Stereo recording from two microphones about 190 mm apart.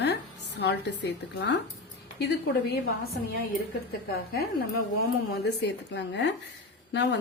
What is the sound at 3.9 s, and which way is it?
A woman's voice, 55° left (ahead or behind).